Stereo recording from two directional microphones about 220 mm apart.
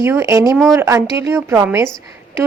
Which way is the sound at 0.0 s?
10° right (ahead or behind).